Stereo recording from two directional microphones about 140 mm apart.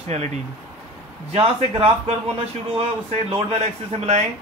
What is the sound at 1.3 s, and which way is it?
Speech, 45° right (ahead or behind).